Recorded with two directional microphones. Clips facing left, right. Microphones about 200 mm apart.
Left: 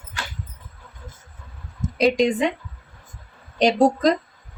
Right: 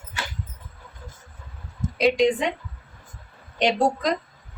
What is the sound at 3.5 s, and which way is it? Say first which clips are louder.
Speech: left 4 dB; 40° left (ahead or behind).